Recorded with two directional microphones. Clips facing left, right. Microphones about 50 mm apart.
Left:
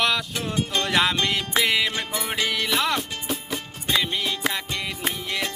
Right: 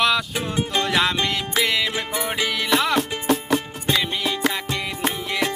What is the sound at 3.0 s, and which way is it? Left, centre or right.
Music, right.